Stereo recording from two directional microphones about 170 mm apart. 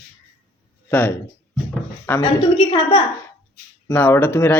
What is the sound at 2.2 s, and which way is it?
Speech, 30° left (ahead or behind).